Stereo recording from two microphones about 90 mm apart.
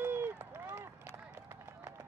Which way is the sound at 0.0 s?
25° right (ahead or behind).